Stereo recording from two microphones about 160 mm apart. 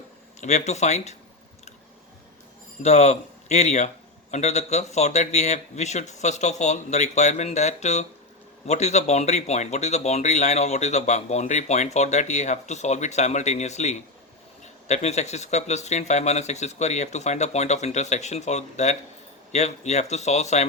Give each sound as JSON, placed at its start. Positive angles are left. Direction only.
{"t": 0.3, "sound": "speech", "side_deg": 45}
{"t": 2.8, "sound": "speech", "side_deg": 45}